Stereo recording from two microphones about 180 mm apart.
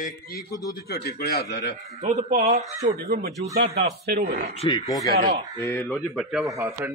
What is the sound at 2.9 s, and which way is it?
Speech, 60° right (ahead or behind).